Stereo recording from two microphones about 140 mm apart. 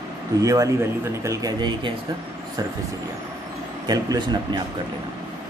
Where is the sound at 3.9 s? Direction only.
30° right (ahead or behind).